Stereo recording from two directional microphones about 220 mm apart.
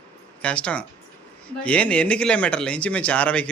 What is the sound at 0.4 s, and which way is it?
A man's voice, 5° left (ahead or behind).